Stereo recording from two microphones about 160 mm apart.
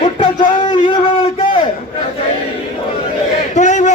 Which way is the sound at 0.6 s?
30° left (ahead or behind).